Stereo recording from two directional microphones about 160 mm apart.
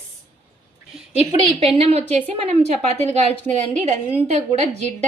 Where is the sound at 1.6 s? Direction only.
40° right (ahead or behind).